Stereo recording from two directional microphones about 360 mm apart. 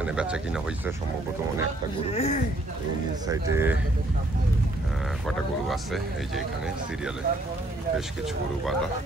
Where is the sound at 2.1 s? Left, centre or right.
Centre.